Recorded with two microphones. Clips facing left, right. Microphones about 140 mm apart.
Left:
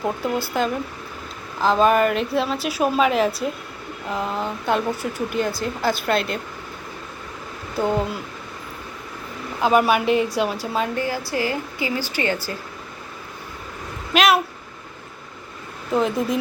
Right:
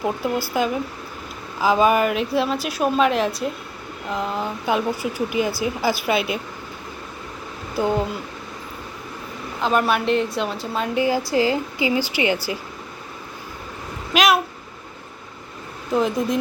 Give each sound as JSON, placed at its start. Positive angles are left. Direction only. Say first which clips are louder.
{"t": 0.0, "sound": "speech", "louder": "right 1 dB", "side_deg": 0}
{"t": 7.8, "sound": "speech", "louder": "even", "side_deg": 0}
{"t": 9.6, "sound": "speech", "louder": "left 2 dB", "side_deg": 10}
{"t": 10.9, "sound": "a woman's voice", "louder": "right 5 dB", "side_deg": -15}
{"t": 14.1, "sound": "speech", "louder": "even", "side_deg": 0}
{"t": 15.9, "sound": "speech", "louder": "even", "side_deg": 0}